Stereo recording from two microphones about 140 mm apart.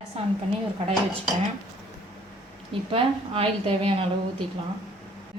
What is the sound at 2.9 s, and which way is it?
A woman's voice, 40° right (ahead or behind).